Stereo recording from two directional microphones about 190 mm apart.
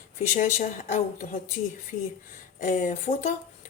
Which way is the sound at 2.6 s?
40° left (ahead or behind).